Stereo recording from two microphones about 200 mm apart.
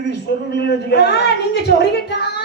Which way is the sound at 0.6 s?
55° left (ahead or behind).